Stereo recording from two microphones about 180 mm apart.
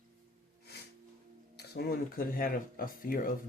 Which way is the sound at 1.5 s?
60° left (ahead or behind).